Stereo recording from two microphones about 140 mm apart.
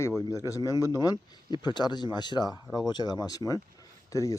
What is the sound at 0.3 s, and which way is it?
Speech, 25° left (ahead or behind).